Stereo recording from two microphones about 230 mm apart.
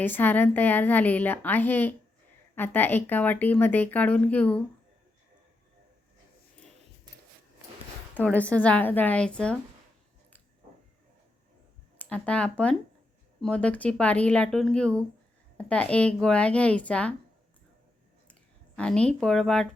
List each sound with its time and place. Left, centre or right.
0.0 s speech: centre
8.1 s speech: centre
11.9 s a woman's voice: centre
18.8 s a woman's voice: centre